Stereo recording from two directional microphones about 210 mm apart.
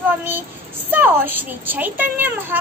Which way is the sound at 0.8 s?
10° right (ahead or behind).